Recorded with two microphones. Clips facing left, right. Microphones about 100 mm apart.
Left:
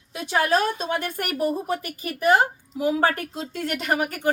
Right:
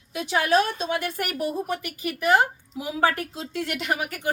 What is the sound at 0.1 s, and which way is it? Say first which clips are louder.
A woman's voice: even; 40° left (ahead or behind).